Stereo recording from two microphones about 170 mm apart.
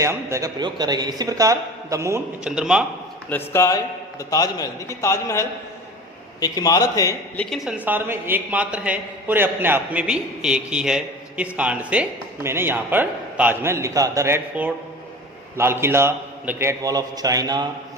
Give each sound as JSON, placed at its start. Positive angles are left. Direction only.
{"t": 0.0, "sound": "a man's voice", "side_deg": -15}
{"t": 2.4, "sound": "a man's voice", "side_deg": -5}
{"t": 3.2, "sound": "a man's voice", "side_deg": 15}
{"t": 7.3, "sound": "a woman's voice", "side_deg": 0}